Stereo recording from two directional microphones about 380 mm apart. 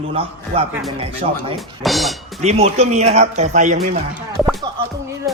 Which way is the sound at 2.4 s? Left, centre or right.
Centre.